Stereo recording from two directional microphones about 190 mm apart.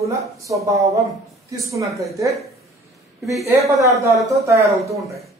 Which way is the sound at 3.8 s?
15° right (ahead or behind).